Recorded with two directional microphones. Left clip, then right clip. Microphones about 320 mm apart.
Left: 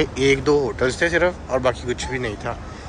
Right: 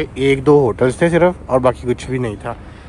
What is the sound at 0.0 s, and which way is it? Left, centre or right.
Speech, centre.